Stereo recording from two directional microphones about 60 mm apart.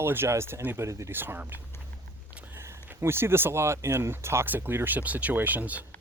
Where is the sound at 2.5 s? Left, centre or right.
Right.